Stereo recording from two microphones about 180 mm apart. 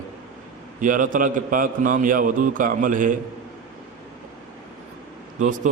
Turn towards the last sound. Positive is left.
turn(degrees=-45)  # may be behind; listen again after turning